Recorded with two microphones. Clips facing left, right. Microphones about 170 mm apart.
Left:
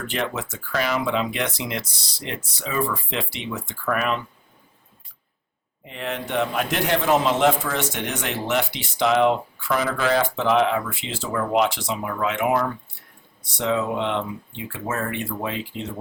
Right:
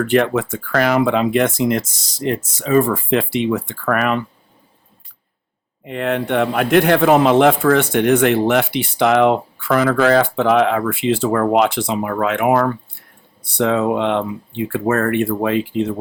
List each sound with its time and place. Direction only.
0.1 s speech: 55° right (ahead or behind)
5.8 s speech: 60° right (ahead or behind)